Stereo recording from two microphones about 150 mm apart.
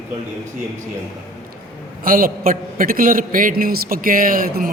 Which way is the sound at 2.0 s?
70° right (ahead or behind).